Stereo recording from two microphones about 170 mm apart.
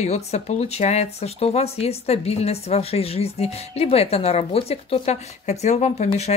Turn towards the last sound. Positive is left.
turn(degrees=40)  # may be behind; listen again after turning